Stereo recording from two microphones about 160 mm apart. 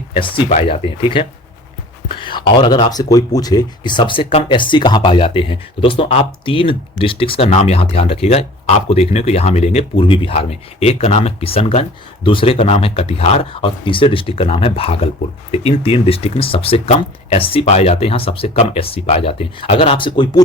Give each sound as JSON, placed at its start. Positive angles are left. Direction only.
{"t": 0.1, "sound": "speech", "side_deg": 30}
{"t": 0.4, "sound": "speech", "side_deg": 50}
{"t": 0.7, "sound": "speech", "side_deg": 35}